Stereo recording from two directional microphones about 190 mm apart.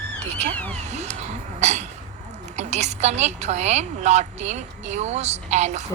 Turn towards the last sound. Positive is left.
turn(degrees=-35)  # may be behind; listen again after turning